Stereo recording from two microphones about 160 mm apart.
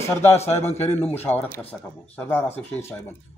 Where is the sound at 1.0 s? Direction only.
15° left (ahead or behind).